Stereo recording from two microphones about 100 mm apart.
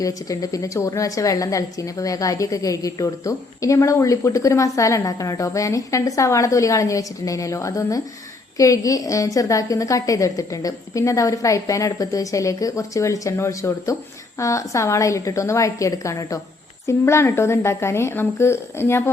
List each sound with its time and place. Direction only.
0.0 s a woman's voice: 35° left (ahead or behind)